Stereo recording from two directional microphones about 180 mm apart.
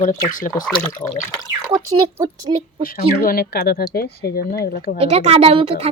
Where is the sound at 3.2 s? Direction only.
55° left (ahead or behind).